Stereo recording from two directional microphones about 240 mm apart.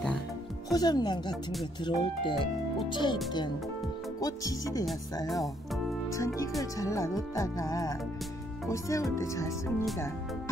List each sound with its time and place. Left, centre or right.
0.7 s speech: centre
4.2 s speech: centre
5.2 s speech: centre
6.1 s speech: centre